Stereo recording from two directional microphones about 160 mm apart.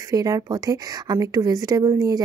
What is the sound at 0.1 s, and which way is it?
Speech, 25° right (ahead or behind).